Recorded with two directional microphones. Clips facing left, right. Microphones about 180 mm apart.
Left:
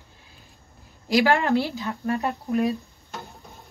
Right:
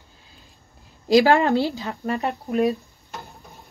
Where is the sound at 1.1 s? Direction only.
25° right (ahead or behind).